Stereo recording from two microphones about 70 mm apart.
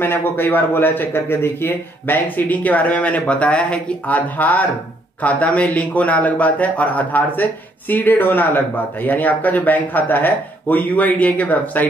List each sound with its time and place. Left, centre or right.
0.0 s a man's voice: left